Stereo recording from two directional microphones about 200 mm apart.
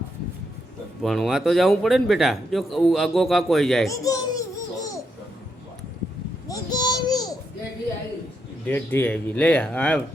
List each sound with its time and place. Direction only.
1.0 s a man's voice: centre (ahead or behind)
3.8 s baby laughter: 15° left (ahead or behind)
6.5 s child singing: 20° left (ahead or behind)
8.6 s speech: 10° left (ahead or behind)